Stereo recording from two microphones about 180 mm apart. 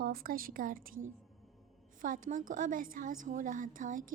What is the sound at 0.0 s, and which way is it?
A woman's voice, 55° right (ahead or behind).